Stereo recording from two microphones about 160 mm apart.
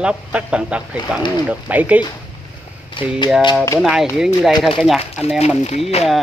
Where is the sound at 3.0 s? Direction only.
30° left (ahead or behind).